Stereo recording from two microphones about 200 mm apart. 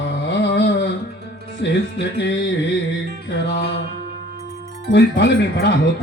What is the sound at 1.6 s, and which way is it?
Music, 60° left (ahead or behind).